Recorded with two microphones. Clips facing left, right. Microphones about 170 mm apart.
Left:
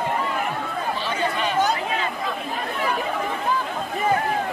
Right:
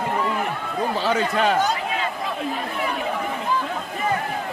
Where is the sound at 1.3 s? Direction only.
85° right.